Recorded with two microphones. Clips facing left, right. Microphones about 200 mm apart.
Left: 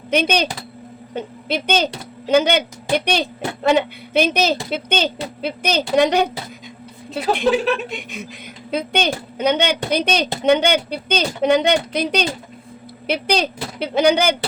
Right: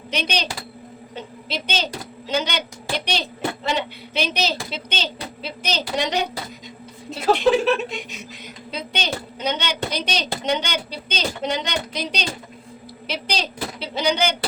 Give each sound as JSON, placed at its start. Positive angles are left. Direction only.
{"t": 0.1, "sound": "a woman's voice", "side_deg": 50}
{"t": 7.9, "sound": "a woman's voice", "side_deg": 55}